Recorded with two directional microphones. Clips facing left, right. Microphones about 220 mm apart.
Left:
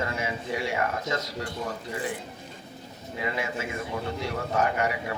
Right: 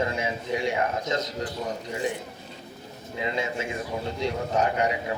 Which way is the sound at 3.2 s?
20° right (ahead or behind).